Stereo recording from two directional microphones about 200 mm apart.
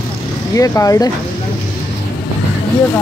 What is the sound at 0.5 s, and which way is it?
Speech, 15° left (ahead or behind).